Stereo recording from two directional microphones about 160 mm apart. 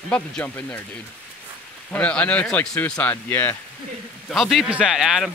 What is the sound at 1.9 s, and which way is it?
Speech, 10° left (ahead or behind).